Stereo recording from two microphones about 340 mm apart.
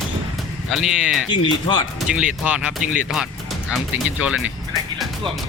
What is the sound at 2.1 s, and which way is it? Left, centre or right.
Speech, centre.